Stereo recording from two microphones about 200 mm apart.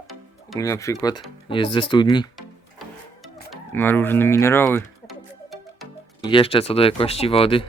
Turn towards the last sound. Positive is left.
turn(degrees=30)  # may be behind; listen again after turning